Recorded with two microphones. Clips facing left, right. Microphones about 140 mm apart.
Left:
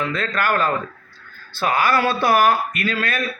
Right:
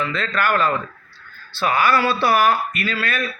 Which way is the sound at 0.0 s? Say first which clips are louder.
Even; 50° left (ahead or behind).